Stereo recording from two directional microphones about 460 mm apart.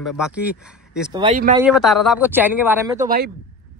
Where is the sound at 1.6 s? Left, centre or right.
Centre.